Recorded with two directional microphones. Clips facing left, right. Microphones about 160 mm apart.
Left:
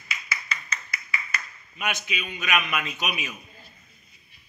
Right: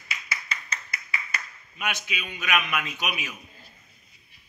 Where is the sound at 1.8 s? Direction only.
15° left (ahead or behind).